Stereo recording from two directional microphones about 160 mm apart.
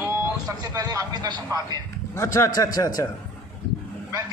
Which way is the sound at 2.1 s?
20° left (ahead or behind).